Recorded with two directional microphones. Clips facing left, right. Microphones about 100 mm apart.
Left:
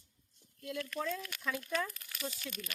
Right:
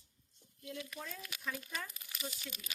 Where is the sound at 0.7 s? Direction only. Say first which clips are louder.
Left 8 dB; 80° left.